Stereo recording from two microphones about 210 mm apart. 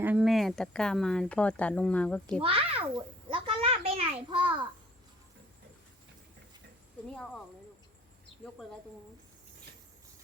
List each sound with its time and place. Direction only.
0.0 s speech: 5° right (ahead or behind)
2.4 s a sound: 25° right (ahead or behind)
7.1 s speech: 5° left (ahead or behind)